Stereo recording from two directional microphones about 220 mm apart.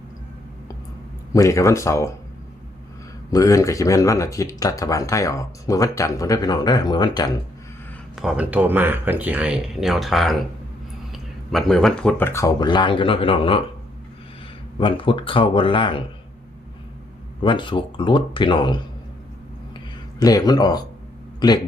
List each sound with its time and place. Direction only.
1.3 s speech: 15° left (ahead or behind)
3.3 s speech: 15° left (ahead or behind)
8.1 s speech: centre (ahead or behind); by 13.6 s 25° left (ahead or behind)
14.8 s speech: 20° left (ahead or behind)
17.4 s speech: 20° left (ahead or behind)
20.1 s speech: 15° left (ahead or behind)